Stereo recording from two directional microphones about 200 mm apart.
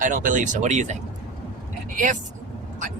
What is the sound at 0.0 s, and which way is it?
Speech, 40° right (ahead or behind).